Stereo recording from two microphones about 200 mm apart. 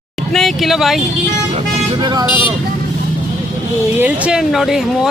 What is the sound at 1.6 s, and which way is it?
Speech, 20° right (ahead or behind).